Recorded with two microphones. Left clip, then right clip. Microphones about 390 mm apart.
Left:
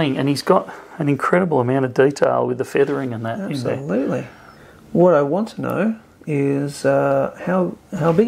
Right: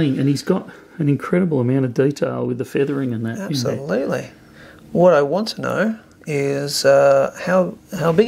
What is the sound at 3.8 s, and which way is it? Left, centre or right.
Speech, right.